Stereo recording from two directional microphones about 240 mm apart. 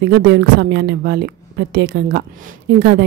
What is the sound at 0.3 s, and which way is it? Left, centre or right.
A woman's voice, right.